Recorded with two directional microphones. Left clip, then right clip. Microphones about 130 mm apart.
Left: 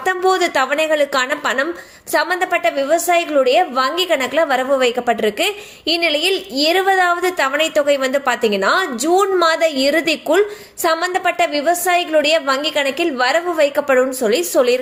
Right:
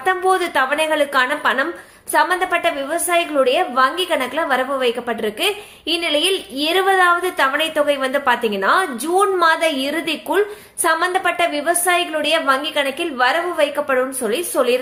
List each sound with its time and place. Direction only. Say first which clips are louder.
0.0 s a woman's voice: left 1 dB; 25° left (ahead or behind)